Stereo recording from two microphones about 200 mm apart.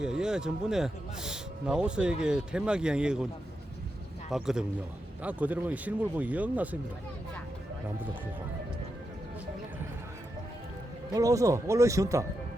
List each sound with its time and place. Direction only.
0.0 s speech: 5° right (ahead or behind)
4.3 s speech: centre (ahead or behind)
11.1 s speech: 15° right (ahead or behind)